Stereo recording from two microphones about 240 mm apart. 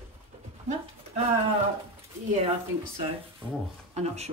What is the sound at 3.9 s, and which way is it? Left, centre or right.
Speech, right.